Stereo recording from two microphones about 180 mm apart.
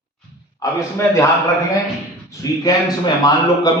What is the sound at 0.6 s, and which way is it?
Speech, 15° left (ahead or behind).